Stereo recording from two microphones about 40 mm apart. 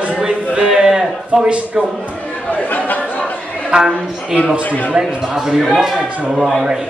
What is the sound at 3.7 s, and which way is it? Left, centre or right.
Speech, centre.